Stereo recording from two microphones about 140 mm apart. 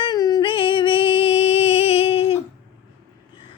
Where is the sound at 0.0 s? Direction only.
30° left (ahead or behind); by 2.4 s 45° left (ahead or behind).